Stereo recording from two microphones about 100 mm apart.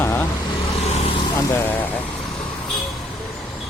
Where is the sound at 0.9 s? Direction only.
90° left.